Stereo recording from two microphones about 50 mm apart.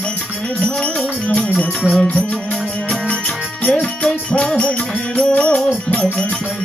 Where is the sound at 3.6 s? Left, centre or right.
Centre.